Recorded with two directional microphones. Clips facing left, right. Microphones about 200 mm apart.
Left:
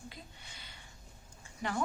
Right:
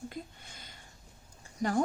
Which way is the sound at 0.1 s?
45° right (ahead or behind).